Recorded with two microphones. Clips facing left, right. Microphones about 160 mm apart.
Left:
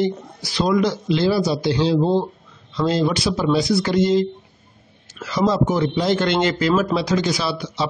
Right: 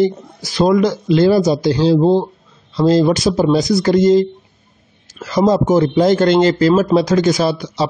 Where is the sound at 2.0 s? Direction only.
30° right (ahead or behind).